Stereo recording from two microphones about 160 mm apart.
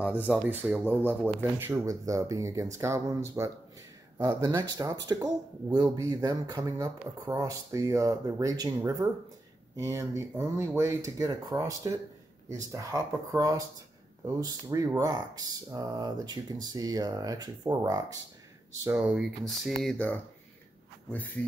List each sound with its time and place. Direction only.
0.3 s speech: 10° right (ahead or behind)
18.9 s speech: 5° right (ahead or behind); by 21.5 s 10° left (ahead or behind)